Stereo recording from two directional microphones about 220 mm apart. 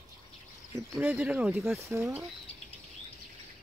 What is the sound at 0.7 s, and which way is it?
Speech, 10° right (ahead or behind).